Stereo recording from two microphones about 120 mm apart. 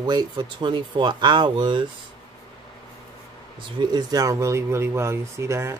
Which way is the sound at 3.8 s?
35° right (ahead or behind).